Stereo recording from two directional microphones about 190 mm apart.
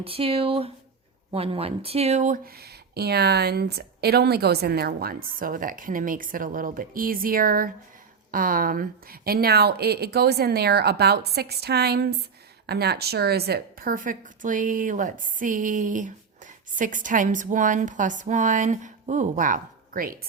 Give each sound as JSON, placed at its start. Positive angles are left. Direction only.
{"t": 0.0, "sound": "speech", "side_deg": -30}